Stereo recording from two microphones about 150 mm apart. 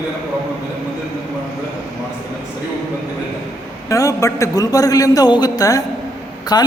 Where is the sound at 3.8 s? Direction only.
20° left (ahead or behind).